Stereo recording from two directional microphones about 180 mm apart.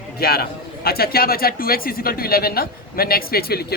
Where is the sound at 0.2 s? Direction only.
60° left (ahead or behind).